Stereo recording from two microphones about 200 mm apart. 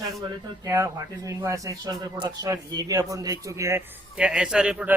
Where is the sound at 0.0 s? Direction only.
15° right (ahead or behind).